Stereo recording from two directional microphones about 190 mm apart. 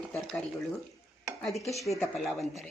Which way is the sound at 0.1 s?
5° left (ahead or behind).